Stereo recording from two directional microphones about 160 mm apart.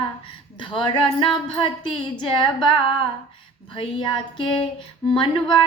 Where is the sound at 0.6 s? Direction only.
30° left (ahead or behind).